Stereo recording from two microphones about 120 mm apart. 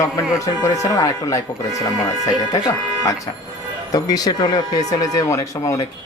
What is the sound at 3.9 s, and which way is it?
Speech, 30° left (ahead or behind).